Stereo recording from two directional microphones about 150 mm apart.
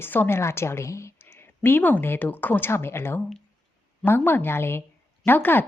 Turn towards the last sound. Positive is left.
turn(degrees=15)  # may be behind; listen again after turning